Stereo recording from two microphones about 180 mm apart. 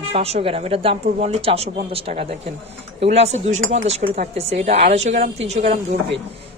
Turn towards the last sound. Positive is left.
turn(degrees=-40)  # may be behind; listen again after turning